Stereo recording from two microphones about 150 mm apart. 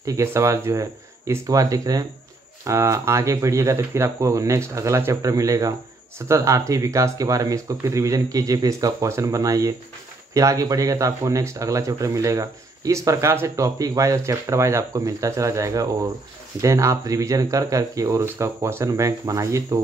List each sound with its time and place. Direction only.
0.0 s speech: 20° right (ahead or behind)